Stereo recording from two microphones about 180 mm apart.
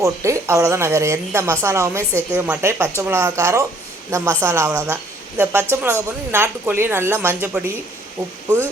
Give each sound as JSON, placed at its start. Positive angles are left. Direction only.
{"t": 0.0, "sound": "a woman's voice", "side_deg": -15}